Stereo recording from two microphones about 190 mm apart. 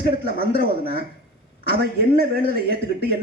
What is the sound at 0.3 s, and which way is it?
Speech, 50° right (ahead or behind).